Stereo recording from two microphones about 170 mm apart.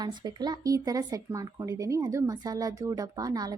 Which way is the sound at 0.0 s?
25° right (ahead or behind).